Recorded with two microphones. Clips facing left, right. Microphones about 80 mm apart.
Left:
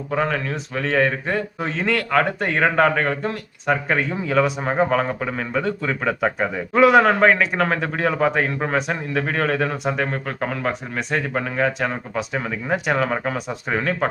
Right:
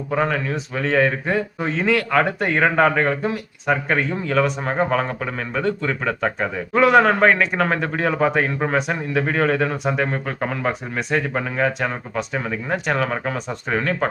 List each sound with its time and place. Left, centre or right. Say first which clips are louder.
0.1 s speech: right 1 dB; centre